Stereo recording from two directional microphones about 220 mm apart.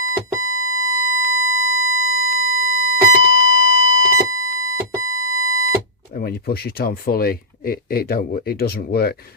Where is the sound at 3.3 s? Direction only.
45° left (ahead or behind).